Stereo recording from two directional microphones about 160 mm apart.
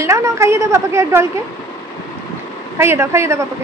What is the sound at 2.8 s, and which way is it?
Speech, 15° right (ahead or behind).